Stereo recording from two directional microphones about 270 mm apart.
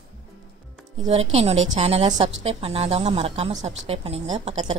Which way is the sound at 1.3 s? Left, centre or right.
Right.